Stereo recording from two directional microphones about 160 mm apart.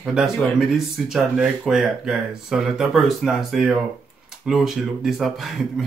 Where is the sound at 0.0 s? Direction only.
5° right (ahead or behind).